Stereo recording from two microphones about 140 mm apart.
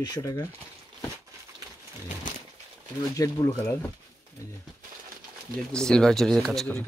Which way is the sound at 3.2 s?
20° left (ahead or behind).